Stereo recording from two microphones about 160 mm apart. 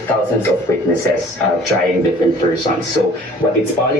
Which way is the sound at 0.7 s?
20° left (ahead or behind).